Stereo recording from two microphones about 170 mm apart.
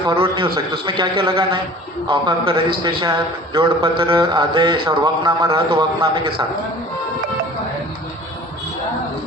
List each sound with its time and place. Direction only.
0.1 s speech: 30° right (ahead or behind)